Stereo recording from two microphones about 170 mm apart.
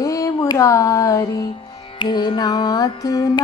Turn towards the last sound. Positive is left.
turn(degrees=20)  # may be behind; listen again after turning